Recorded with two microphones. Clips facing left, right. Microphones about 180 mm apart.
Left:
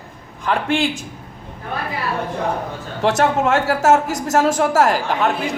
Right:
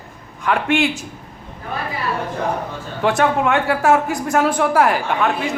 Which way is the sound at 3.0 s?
40° left (ahead or behind).